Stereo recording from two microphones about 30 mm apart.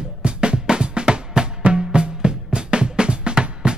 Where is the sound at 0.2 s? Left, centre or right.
Right.